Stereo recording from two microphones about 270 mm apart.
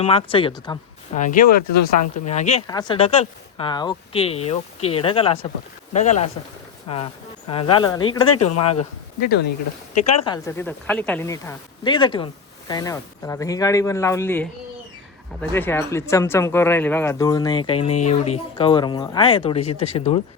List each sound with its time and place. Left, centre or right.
0.0 s speech: left
8.3 s speech: left
9.2 s speech: left
10.2 s speech: centre